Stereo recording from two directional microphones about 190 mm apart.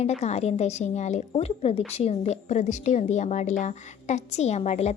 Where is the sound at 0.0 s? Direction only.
35° left (ahead or behind).